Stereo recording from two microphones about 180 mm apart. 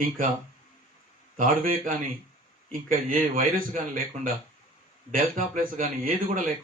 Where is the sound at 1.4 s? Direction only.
50° right (ahead or behind).